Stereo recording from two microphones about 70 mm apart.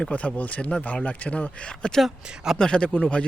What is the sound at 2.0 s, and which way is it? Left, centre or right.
Speech, centre.